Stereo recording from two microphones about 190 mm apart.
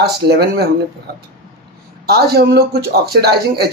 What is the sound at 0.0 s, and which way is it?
Speech, 55° right (ahead or behind).